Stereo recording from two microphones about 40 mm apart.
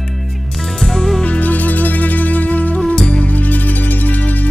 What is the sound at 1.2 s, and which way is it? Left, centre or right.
Music, left.